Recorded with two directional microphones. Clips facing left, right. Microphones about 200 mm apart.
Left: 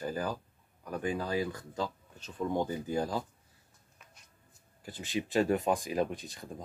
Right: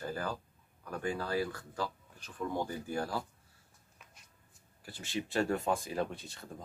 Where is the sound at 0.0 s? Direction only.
15° left (ahead or behind).